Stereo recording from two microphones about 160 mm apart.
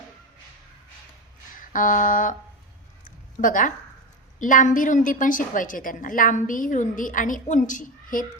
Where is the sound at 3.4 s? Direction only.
55° left (ahead or behind).